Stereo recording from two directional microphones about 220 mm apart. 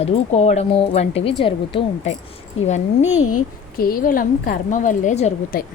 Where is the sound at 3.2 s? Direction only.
90° left.